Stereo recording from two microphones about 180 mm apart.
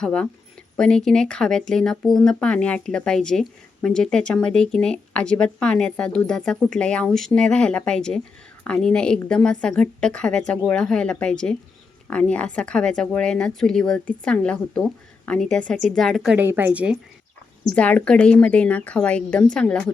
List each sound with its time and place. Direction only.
0.0 s speech: 5° left (ahead or behind)
17.7 s a woman's voice: 5° left (ahead or behind)